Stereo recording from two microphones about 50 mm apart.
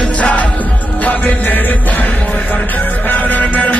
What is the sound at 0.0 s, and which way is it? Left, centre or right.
Music, left.